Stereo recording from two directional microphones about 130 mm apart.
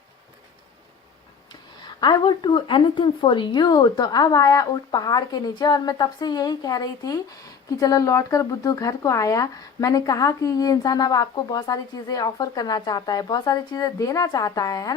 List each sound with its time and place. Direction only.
1.8 s a woman's voice: 35° left (ahead or behind)